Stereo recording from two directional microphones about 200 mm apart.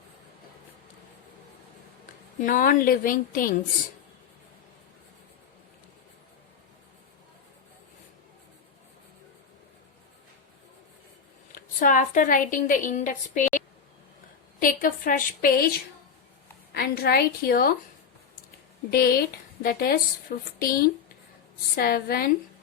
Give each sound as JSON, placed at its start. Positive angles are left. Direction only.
{"t": 2.4, "sound": "a woman's voice", "side_deg": 40}
{"t": 11.5, "sound": "a woman's voice", "side_deg": 40}
{"t": 14.6, "sound": "a woman's voice", "side_deg": 45}
{"t": 18.9, "sound": "a woman's voice", "side_deg": 50}